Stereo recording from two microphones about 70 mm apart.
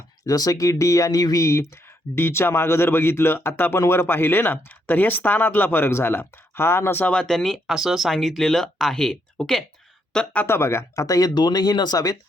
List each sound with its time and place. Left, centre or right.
0.3 s speech: left
1.2 s speech: left
1.5 s speech: left
7.0 s speech: centre
10.4 s speech: left
11.0 s speech: left